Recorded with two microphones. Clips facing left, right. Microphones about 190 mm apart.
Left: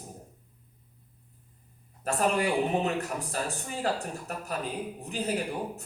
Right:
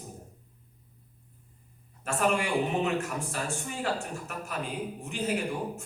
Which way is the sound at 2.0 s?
35° left (ahead or behind).